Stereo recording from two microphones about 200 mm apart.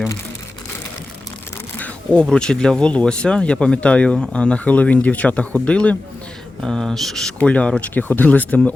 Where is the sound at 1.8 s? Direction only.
5° left (ahead or behind).